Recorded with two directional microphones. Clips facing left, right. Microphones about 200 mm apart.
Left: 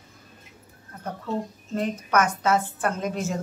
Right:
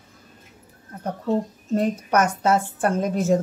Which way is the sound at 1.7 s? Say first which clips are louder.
Right 4 dB; 40° right (ahead or behind).